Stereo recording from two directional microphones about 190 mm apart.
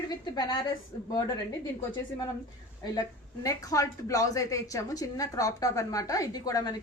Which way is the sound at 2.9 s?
20° left (ahead or behind).